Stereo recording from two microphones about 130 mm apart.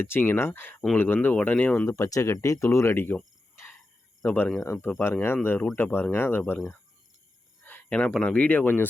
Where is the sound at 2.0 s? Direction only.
25° left (ahead or behind).